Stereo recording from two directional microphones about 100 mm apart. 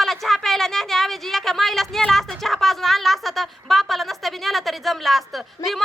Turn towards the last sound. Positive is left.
turn(degrees=0)  # may be behind; listen again after turning